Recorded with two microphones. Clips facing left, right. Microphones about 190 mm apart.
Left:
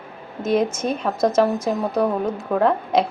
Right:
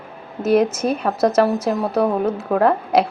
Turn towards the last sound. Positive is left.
turn(degrees=-5)  # may be behind; listen again after turning